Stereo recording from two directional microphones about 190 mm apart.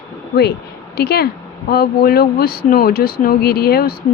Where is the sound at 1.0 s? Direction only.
55° left (ahead or behind).